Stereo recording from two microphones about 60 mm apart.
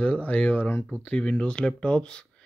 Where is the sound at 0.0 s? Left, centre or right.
Left.